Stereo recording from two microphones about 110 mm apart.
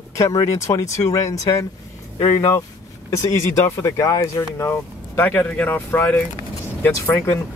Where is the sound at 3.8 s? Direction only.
30° left (ahead or behind).